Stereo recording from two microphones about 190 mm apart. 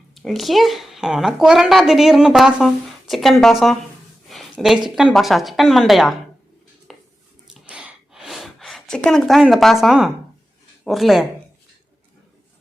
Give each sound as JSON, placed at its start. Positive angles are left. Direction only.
{"t": 0.1, "sound": "a woman's voice", "side_deg": 0}
{"t": 4.3, "sound": "a sound", "side_deg": 0}
{"t": 5.1, "sound": "a woman's voice", "side_deg": 0}
{"t": 6.9, "sound": "dishes", "side_deg": 0}
{"t": 7.6, "sound": "a sound", "side_deg": -5}
{"t": 10.8, "sound": "a woman's voice", "side_deg": 0}